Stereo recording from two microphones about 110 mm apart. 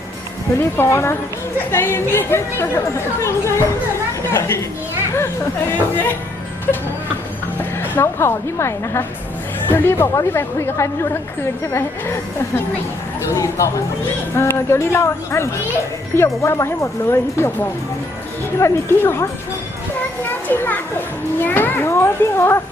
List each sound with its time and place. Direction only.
0.6 s a child's voice: 25° left (ahead or behind)
7.6 s a woman's voice: 20° left (ahead or behind)
13.2 s a child's voice: 25° left (ahead or behind)